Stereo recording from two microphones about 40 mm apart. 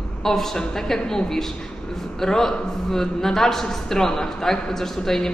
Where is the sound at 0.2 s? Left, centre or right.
Centre.